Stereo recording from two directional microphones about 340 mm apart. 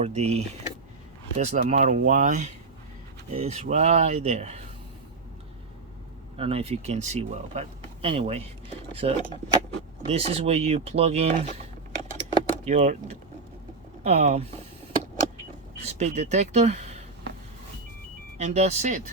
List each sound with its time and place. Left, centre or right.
0.0 s speech: centre
6.3 s speech: centre
12.3 s vehicle: centre
14.0 s speech: centre
15.9 s speech: centre
18.3 s speech: centre